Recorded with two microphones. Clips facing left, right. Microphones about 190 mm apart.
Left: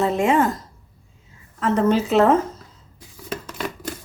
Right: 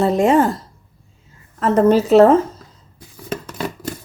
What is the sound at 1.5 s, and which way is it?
Speech, 45° right (ahead or behind).